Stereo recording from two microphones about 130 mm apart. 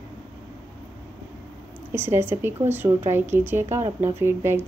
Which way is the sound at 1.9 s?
15° right (ahead or behind).